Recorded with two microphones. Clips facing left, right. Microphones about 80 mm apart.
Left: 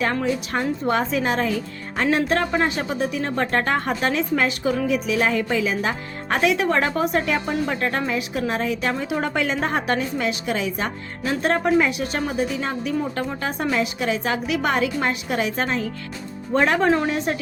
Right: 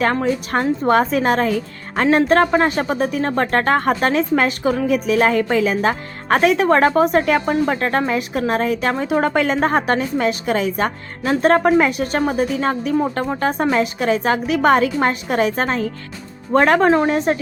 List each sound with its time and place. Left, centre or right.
0.0 s speech: right
16.5 s speech: right
16.9 s speech: right